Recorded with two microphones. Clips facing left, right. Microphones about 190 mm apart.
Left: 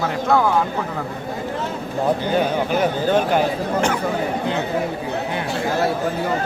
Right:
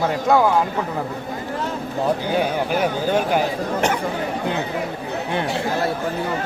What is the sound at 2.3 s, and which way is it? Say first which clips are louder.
A man's voice: left 1 dB; 10° right (ahead or behind).